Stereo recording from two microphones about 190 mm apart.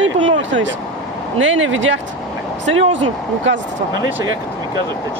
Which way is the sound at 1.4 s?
85° right.